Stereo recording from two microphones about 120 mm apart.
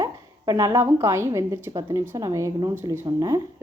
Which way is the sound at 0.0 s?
30° right (ahead or behind).